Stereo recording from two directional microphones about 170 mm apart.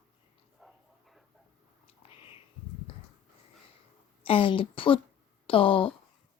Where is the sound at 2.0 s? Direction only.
35° left (ahead or behind).